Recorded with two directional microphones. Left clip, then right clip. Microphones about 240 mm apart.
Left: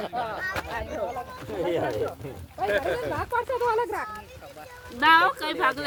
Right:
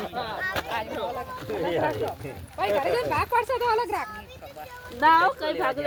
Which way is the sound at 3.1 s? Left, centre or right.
Right.